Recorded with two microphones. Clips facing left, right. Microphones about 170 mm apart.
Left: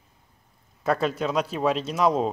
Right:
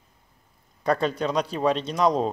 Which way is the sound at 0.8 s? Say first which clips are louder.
Right 1 dB; 5° left (ahead or behind).